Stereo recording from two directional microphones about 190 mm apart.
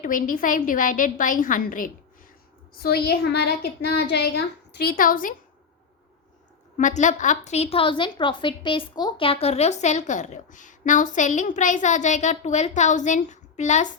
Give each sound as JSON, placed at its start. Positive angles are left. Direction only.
{"t": 0.0, "sound": "a woman's voice", "side_deg": 45}
{"t": 2.7, "sound": "a woman's voice", "side_deg": 55}
{"t": 6.7, "sound": "a woman's voice", "side_deg": 40}